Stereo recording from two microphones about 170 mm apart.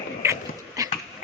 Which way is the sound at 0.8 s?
20° right (ahead or behind).